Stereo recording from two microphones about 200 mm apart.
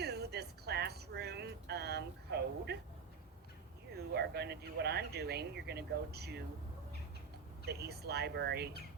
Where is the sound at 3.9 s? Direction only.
55° right (ahead or behind).